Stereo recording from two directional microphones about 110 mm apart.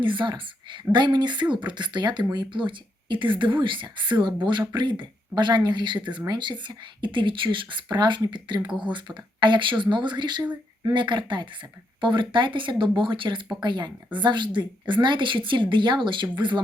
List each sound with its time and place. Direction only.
0.0 s speech: 50° right (ahead or behind)